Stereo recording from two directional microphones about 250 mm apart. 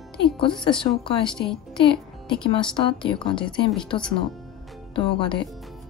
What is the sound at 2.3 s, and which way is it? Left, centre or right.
A woman's voice, centre.